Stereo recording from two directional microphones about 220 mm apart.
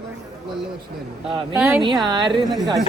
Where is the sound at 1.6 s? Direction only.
5° right (ahead or behind).